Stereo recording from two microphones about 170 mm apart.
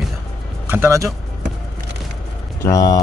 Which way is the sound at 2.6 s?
20° left (ahead or behind).